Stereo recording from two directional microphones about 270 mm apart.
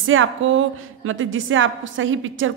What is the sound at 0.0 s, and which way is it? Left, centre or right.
A woman's voice, right.